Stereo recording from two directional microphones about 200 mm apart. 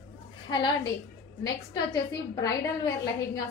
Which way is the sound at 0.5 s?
20° left (ahead or behind).